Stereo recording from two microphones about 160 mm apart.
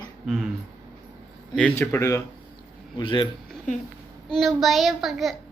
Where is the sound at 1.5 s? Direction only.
10° left (ahead or behind).